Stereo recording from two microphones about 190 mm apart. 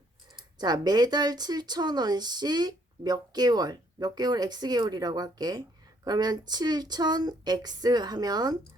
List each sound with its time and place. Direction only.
0.6 s speech: 20° right (ahead or behind)